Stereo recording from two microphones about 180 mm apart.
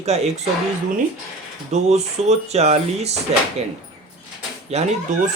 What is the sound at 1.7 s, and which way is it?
Speech, 40° right (ahead or behind).